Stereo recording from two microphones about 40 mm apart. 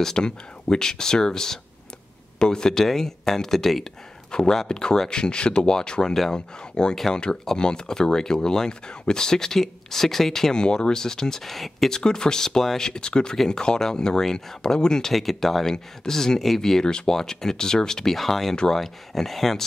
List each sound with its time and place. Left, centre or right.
0.0 s speech: centre
4.3 s speech: left; by 11.9 s centre
11.9 s speech: centre
15.1 s speech: centre
16.8 s speech: centre